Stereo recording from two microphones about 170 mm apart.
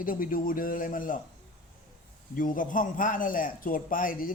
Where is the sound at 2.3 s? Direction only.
50° left (ahead or behind).